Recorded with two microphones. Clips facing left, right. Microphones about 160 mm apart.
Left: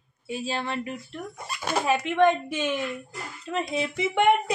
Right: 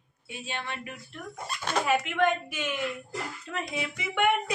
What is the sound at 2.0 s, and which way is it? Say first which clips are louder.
A woman's voice: left 5 dB; 25° left (ahead or behind).